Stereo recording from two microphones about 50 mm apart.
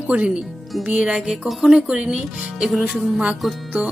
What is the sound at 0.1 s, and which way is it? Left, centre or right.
Speech, right.